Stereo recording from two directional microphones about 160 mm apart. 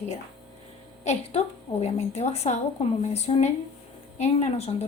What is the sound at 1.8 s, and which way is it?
A woman's voice, 45° left (ahead or behind).